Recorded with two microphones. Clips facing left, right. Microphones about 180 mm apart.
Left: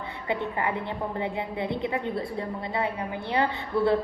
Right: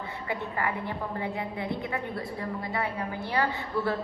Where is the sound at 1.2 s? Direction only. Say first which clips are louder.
Left 3 dB; 20° left (ahead or behind).